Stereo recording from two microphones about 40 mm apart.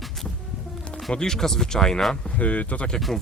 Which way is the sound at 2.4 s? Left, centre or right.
Left.